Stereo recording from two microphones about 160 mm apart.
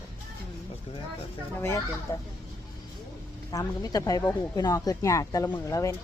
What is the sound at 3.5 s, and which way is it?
Speech, 20° left (ahead or behind).